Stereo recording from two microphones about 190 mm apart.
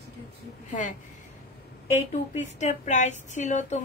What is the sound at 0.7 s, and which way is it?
Speech, 40° left (ahead or behind).